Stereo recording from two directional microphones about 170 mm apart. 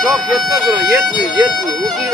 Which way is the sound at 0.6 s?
20° right (ahead or behind).